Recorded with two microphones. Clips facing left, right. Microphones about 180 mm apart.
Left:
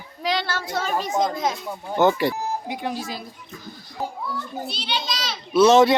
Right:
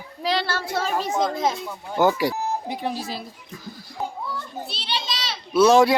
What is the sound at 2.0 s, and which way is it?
Speech, 10° right (ahead or behind).